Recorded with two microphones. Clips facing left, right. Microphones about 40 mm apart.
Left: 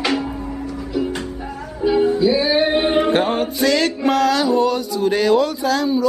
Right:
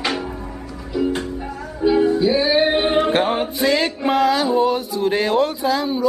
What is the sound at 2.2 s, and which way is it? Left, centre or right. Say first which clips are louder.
Music: left 1 dB; right.